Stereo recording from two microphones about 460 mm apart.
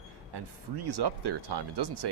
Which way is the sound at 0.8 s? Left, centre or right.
Right.